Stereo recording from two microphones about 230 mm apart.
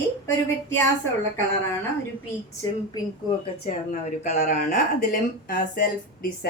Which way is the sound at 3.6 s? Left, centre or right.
Left.